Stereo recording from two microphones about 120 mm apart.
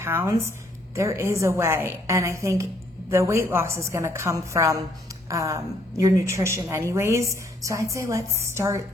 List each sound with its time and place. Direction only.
0.0 s a woman's voice: 20° right (ahead or behind)